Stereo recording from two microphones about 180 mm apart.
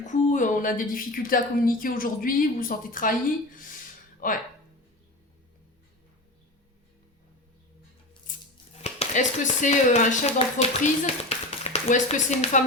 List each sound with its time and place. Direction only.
0.0 s a woman's voice: 45° left (ahead or behind)
8.3 s scissors: 50° left (ahead or behind)
8.8 s speech: 40° left (ahead or behind)